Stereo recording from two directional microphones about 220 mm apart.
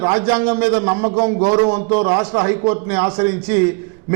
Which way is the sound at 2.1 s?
25° right (ahead or behind).